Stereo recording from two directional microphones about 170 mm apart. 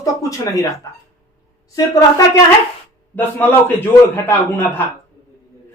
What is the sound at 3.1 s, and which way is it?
A man's voice, 10° left (ahead or behind).